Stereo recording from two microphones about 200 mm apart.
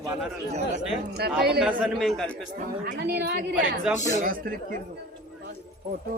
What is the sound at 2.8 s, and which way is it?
Speech, 50° right (ahead or behind).